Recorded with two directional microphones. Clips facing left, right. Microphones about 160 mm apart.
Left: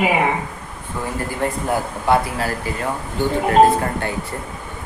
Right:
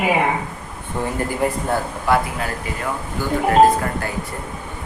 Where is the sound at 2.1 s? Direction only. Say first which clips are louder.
Left 2 dB; 35° left (ahead or behind).